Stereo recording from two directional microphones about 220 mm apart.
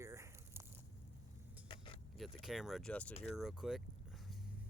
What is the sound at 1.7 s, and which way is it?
Vehicle, 25° left (ahead or behind).